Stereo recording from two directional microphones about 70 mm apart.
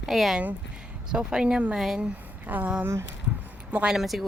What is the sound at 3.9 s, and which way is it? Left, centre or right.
Speech, centre.